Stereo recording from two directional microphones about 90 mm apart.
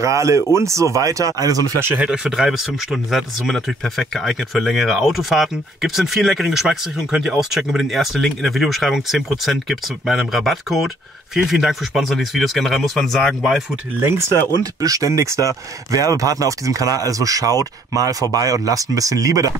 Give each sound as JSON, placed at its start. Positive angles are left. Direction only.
{"t": 0.0, "sound": "speech", "side_deg": -35}
{"t": 2.0, "sound": "speech", "side_deg": -10}
{"t": 14.6, "sound": "speech", "side_deg": -40}